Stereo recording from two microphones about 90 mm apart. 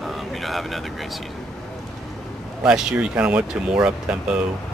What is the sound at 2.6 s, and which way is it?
Speech, 10° right (ahead or behind).